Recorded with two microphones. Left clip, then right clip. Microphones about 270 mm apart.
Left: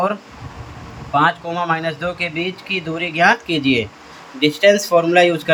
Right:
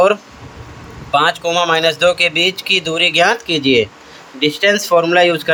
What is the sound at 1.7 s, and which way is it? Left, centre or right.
Speech, right.